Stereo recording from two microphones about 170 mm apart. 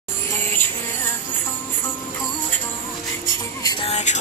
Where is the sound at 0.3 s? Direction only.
15° left (ahead or behind).